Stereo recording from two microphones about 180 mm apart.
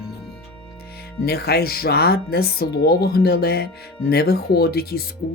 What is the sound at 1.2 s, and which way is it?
Speech, 60° left (ahead or behind).